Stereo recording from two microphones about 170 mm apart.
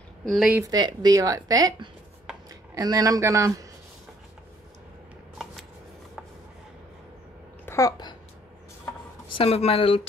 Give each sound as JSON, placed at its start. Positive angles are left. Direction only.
{"t": 0.2, "sound": "speech", "side_deg": 0}
{"t": 0.6, "sound": "a woman's voice", "side_deg": -25}
{"t": 7.6, "sound": "babbling", "side_deg": 15}
{"t": 9.3, "sound": "speech", "side_deg": 35}